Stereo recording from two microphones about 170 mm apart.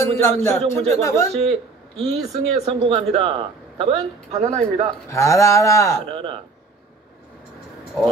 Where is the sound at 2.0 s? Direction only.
35° right (ahead or behind).